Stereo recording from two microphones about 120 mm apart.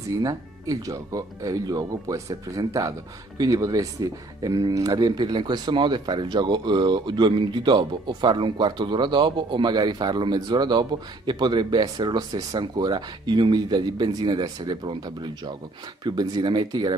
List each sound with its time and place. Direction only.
0.2 s speech: 30° right (ahead or behind)